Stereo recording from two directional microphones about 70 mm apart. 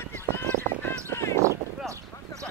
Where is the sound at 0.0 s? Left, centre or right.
Left.